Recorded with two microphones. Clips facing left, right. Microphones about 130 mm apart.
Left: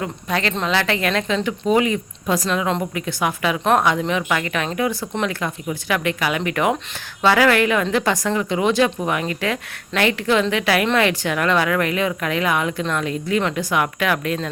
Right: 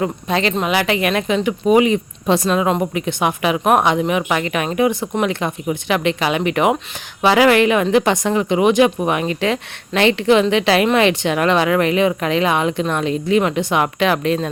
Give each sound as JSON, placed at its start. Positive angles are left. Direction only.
{"t": 0.0, "sound": "a woman's voice", "side_deg": -20}